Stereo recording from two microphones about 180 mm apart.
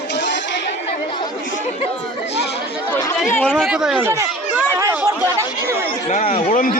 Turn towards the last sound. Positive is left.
turn(degrees=50)  # may be behind; listen again after turning